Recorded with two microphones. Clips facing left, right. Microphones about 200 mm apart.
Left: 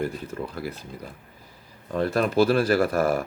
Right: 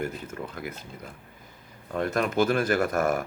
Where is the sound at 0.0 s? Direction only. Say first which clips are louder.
Left 3 dB; 35° left (ahead or behind).